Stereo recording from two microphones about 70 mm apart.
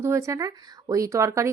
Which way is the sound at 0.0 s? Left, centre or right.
Right.